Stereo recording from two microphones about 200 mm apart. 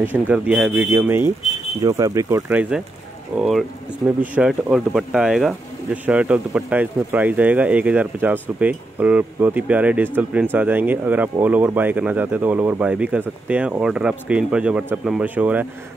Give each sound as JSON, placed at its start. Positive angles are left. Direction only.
{"t": 0.0, "sound": "speech", "side_deg": -10}